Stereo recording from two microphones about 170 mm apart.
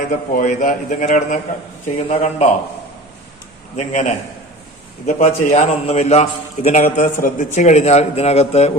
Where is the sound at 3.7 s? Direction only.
45° left (ahead or behind).